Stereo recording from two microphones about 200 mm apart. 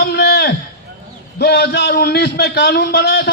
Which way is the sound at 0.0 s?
55° left (ahead or behind).